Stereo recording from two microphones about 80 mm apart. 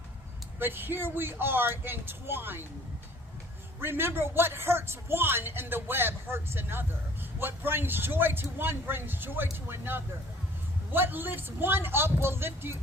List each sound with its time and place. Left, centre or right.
0.6 s speech: right
3.8 s speech: right